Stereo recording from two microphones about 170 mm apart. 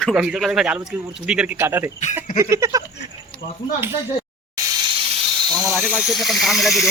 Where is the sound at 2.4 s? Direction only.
15° right (ahead or behind).